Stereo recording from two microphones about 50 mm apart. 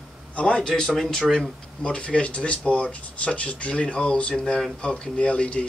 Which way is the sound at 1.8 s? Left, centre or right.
Left.